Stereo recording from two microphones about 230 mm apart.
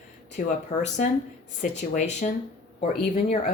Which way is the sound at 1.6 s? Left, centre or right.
Left.